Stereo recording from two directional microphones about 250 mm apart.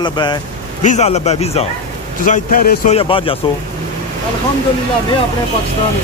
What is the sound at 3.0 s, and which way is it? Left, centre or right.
Speech, left.